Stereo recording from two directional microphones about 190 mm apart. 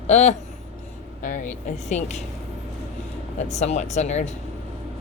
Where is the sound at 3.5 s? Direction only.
35° left (ahead or behind).